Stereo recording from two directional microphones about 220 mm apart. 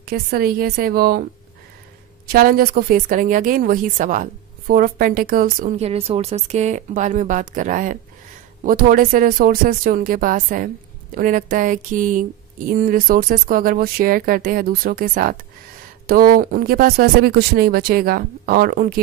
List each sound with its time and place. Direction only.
0.0 s speech: 45° right (ahead or behind)
2.2 s speech: 40° right (ahead or behind)